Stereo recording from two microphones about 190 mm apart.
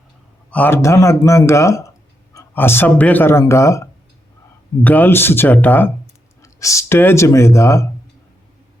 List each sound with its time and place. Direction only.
0.5 s speech: 10° left (ahead or behind)